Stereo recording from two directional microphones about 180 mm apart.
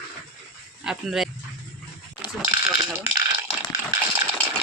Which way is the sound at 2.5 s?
20° right (ahead or behind).